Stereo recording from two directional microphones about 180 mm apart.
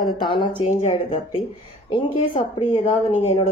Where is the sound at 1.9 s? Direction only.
30° left (ahead or behind).